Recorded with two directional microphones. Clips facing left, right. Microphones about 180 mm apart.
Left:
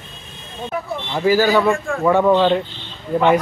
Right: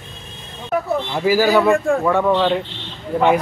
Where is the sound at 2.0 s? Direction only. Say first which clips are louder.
Left 7 dB; 10° left (ahead or behind).